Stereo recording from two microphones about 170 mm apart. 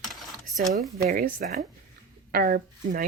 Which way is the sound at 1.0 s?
55° right (ahead or behind).